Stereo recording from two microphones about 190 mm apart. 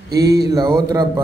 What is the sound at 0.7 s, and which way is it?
Speech, 20° right (ahead or behind).